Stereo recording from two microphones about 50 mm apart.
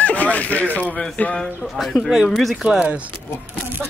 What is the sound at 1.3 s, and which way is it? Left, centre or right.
Speech, centre.